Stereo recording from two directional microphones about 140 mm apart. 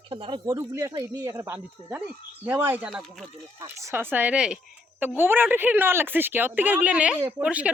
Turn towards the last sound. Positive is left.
turn(degrees=-10)  # may be behind; listen again after turning